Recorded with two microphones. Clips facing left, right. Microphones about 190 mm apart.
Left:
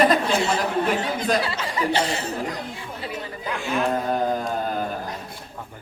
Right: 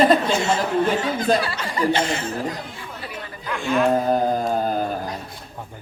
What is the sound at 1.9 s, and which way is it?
Speech, 35° left (ahead or behind).